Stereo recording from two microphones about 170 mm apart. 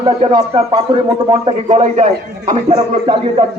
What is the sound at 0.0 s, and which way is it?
A man's voice, 30° right (ahead or behind).